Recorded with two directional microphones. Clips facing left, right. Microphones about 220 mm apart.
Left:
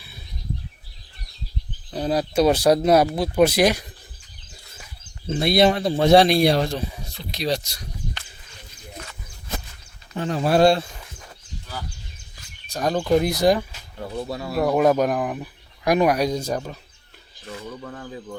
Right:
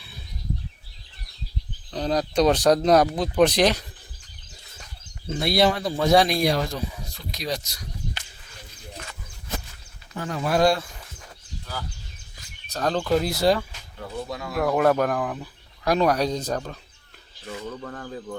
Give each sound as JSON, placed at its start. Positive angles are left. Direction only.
{"t": 1.9, "sound": "speech", "side_deg": 10}
{"t": 5.3, "sound": "speech", "side_deg": 20}
{"t": 10.2, "sound": "speech", "side_deg": 30}
{"t": 12.7, "sound": "speech", "side_deg": 10}
{"t": 14.3, "sound": "speech", "side_deg": 30}
{"t": 14.6, "sound": "speech", "side_deg": 15}